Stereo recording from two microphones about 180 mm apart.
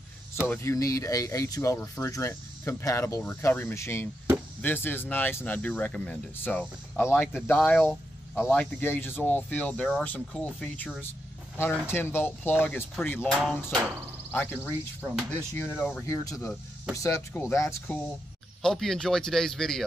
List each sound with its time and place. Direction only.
0.5 s speech: 15° left (ahead or behind)
18.6 s speech: centre (ahead or behind)